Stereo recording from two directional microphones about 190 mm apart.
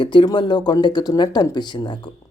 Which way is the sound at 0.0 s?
25° left (ahead or behind).